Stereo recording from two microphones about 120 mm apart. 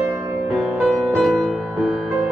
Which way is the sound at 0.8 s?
5° right (ahead or behind).